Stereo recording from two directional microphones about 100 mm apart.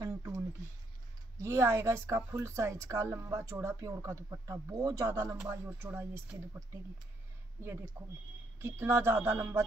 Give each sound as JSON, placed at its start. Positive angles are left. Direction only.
{"t": 0.0, "sound": "a sound", "side_deg": -35}
{"t": 1.4, "sound": "a woman's voice", "side_deg": -25}
{"t": 8.0, "sound": "a woman's voice", "side_deg": -25}